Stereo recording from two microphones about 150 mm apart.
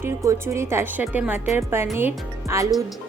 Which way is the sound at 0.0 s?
15° right (ahead or behind).